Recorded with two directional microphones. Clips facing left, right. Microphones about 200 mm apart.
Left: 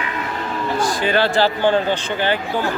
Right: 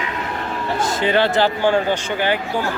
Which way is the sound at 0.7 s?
20° right (ahead or behind).